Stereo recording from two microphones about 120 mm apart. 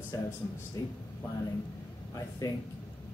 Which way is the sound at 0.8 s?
25° left (ahead or behind).